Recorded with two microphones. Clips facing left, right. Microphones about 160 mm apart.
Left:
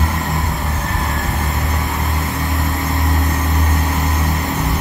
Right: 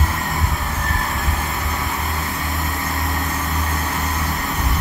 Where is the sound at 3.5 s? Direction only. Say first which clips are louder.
Left 4 dB; 25° left (ahead or behind).